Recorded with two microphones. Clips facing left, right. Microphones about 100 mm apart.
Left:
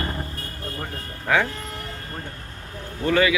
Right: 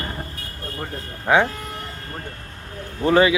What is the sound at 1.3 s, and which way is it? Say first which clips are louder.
Speech: right 4 dB; 20° right (ahead or behind).